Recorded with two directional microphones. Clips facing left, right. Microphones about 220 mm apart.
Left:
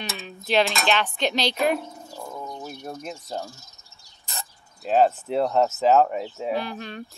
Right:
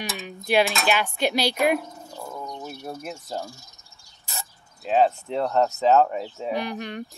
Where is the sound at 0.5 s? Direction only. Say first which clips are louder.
Right 1 dB; 10° right (ahead or behind).